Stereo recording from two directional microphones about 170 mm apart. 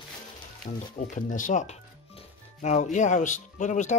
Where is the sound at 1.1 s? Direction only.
50° left (ahead or behind).